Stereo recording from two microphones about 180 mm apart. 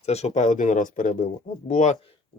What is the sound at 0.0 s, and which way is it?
Speech, 35° left (ahead or behind).